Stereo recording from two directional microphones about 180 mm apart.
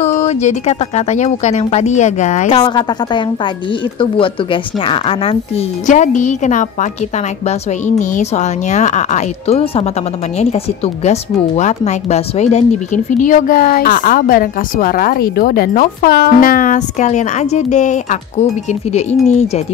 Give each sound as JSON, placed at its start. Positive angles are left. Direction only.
{"t": 0.0, "sound": "speech", "side_deg": 40}
{"t": 2.6, "sound": "a woman's voice", "side_deg": 25}